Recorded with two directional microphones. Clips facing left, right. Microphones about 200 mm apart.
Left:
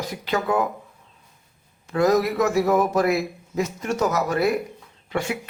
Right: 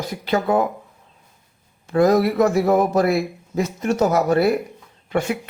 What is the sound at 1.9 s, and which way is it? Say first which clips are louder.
Speech: right 3 dB; 30° right (ahead or behind).